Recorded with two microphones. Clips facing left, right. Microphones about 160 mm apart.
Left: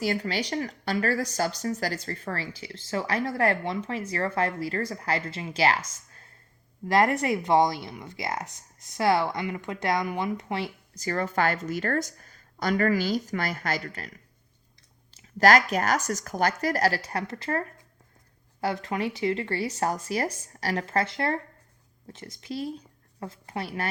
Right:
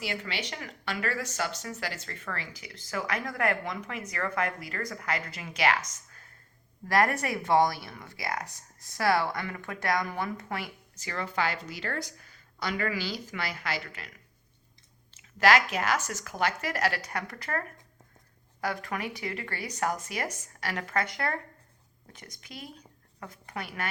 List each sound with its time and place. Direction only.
0.0 s speech: 40° left (ahead or behind); by 10.7 s 20° left (ahead or behind)
10.9 s a woman's voice: 40° left (ahead or behind)
15.1 s speech: 40° left (ahead or behind)